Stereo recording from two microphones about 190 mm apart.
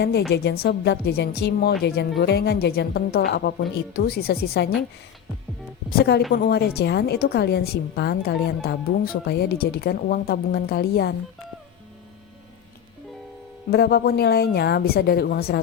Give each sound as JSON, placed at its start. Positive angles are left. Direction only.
{"t": 0.0, "sound": "a woman's voice", "side_deg": 60}
{"t": 6.0, "sound": "a woman's voice", "side_deg": 60}
{"t": 13.7, "sound": "a woman's voice", "side_deg": 60}